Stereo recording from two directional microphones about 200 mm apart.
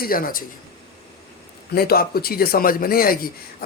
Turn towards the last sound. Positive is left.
turn(degrees=45)  # may be behind; listen again after turning